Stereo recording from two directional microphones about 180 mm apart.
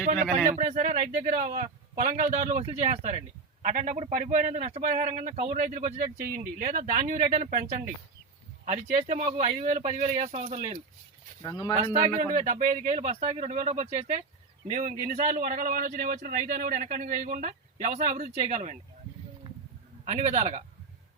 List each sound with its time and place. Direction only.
0.0 s speech: 50° right (ahead or behind)
11.4 s speech: 20° left (ahead or behind)
11.9 s speech: 45° right (ahead or behind)
20.1 s speech: 40° right (ahead or behind)